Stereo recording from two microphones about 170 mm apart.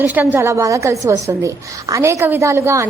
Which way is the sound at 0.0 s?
10° right (ahead or behind).